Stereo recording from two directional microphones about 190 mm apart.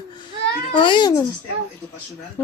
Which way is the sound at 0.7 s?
25° left (ahead or behind).